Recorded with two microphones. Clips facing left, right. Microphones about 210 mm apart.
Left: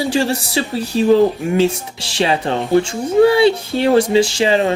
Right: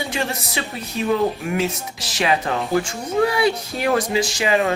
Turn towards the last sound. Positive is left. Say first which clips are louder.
# left 6 dB
turn(degrees=30)  # may be behind; listen again after turning